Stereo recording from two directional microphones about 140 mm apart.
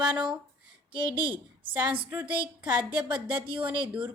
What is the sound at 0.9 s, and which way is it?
A woman's voice, 35° right (ahead or behind).